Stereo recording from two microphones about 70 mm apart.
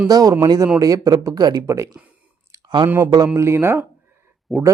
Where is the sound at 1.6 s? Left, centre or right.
Right.